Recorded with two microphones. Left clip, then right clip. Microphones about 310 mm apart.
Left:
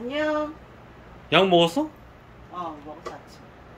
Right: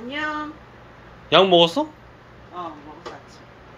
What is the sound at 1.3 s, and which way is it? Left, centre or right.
Speech, centre.